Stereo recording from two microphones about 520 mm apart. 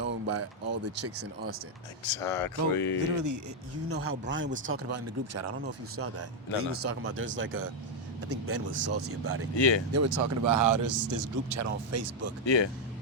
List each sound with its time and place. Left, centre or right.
0.0 s speech: right
2.0 s speech: left
3.2 s speech: right
6.6 s speech: right
9.6 s speech: left
9.9 s speech: right
12.5 s speech: left